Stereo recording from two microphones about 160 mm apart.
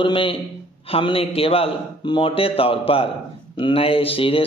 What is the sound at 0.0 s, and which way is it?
Speech, 35° left (ahead or behind).